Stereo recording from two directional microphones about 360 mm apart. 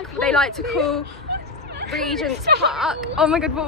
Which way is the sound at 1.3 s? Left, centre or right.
Right.